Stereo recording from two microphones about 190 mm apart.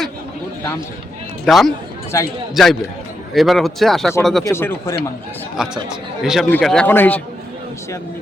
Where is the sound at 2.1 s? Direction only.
15° left (ahead or behind).